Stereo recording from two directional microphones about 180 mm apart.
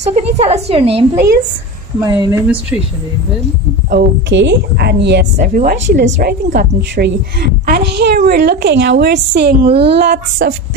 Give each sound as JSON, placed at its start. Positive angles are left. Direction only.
{"t": 0.0, "sound": "a woman's voice", "side_deg": -35}
{"t": 2.0, "sound": "speech", "side_deg": -20}
{"t": 2.4, "sound": "speech", "side_deg": -5}
{"t": 3.9, "sound": "a woman's voice", "side_deg": -75}
{"t": 5.4, "sound": "a woman's voice", "side_deg": -45}
{"t": 6.2, "sound": "a woman's voice", "side_deg": -55}